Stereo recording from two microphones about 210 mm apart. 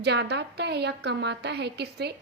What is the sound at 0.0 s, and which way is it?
A woman's voice, 55° right (ahead or behind).